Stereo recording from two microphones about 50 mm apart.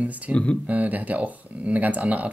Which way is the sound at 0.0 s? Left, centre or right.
Right.